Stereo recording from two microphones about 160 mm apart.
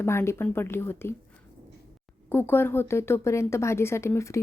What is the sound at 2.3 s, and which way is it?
A woman's voice, 15° left (ahead or behind).